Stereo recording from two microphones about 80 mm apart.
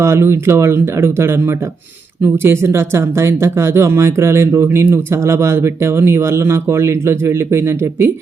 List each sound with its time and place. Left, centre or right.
0.0 s speech: right